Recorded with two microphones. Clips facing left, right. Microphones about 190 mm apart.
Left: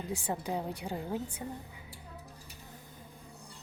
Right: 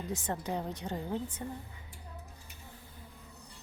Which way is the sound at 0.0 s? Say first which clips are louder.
Left 1 dB; 10° left (ahead or behind).